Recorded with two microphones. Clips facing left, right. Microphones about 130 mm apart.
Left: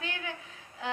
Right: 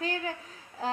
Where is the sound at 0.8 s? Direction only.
35° right (ahead or behind).